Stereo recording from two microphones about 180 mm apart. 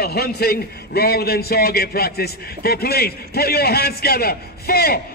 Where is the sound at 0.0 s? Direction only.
60° left (ahead or behind).